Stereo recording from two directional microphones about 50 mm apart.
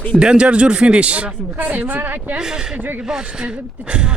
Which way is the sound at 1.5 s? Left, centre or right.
Right.